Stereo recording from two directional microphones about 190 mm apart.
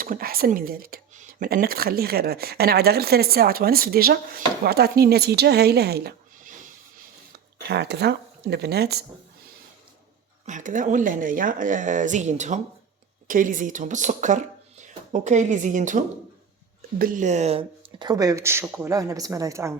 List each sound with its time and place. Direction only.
0.0 s speech: 50° right (ahead or behind)
7.7 s speech: 60° right (ahead or behind)
10.4 s speech: 40° right (ahead or behind)
17.0 s speech: 45° right (ahead or behind); by 19.7 s 15° right (ahead or behind)